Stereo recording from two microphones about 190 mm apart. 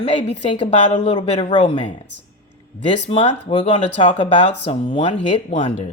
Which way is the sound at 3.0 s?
30° left (ahead or behind).